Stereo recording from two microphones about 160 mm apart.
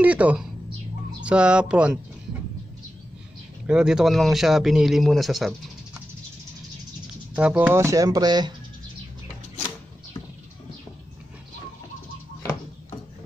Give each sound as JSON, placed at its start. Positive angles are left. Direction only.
{"t": 0.0, "sound": "speech", "side_deg": -10}
{"t": 3.6, "sound": "a man's voice", "side_deg": -5}
{"t": 7.3, "sound": "speech", "side_deg": -10}